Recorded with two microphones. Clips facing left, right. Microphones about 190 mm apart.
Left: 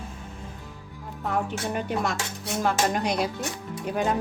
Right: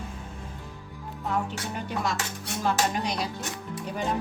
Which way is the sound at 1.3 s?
55° left (ahead or behind).